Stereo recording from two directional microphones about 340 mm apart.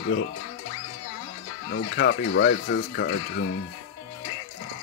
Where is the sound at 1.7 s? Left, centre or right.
Left.